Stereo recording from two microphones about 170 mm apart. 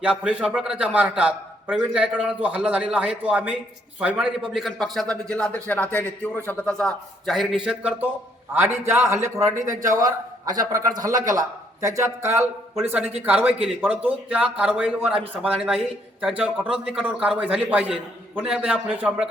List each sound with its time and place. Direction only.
0.0 s a man's voice: 5° right (ahead or behind)